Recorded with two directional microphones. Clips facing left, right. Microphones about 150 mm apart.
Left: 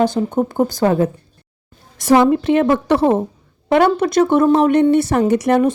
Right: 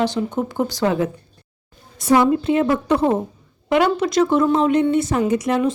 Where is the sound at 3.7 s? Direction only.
55° left (ahead or behind).